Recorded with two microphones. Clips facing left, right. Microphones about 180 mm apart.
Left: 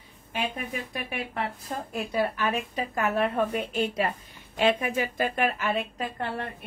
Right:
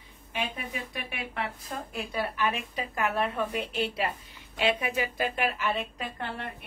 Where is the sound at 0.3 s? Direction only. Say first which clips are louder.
Left 3 dB; 45° left (ahead or behind).